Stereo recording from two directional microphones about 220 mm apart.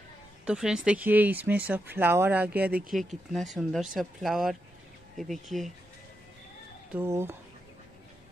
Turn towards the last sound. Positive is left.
turn(degrees=-10)  # may be behind; listen again after turning